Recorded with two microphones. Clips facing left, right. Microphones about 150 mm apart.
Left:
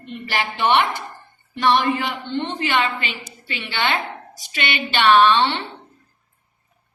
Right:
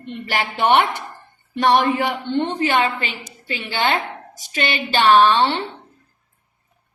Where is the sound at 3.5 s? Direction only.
40° right (ahead or behind).